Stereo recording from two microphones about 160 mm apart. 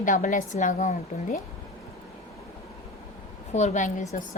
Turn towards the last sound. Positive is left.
turn(degrees=50)  # may be behind; listen again after turning